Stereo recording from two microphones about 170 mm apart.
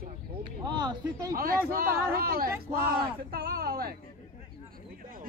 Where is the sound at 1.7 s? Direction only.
60° right (ahead or behind).